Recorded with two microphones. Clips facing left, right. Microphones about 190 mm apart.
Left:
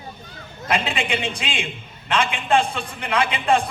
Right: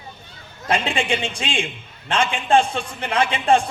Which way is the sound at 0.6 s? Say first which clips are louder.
Right 2 dB; 30° right (ahead or behind).